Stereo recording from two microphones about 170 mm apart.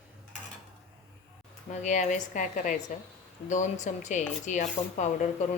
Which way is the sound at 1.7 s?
45° left (ahead or behind).